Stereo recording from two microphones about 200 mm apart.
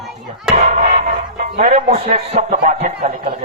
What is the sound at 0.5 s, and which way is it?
Speech, 35° right (ahead or behind).